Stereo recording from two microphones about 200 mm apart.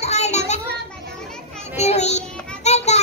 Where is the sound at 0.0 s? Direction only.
35° left (ahead or behind).